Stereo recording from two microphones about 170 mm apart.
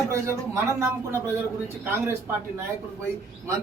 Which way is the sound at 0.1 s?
15° right (ahead or behind).